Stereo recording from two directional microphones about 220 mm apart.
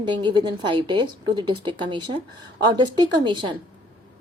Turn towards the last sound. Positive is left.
turn(degrees=-20)  # may be behind; listen again after turning